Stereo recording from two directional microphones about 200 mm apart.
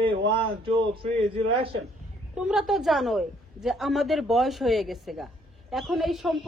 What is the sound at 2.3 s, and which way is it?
A woman's voice, 5° right (ahead or behind).